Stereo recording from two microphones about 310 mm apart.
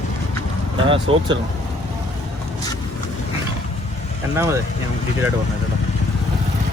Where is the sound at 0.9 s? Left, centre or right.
Centre.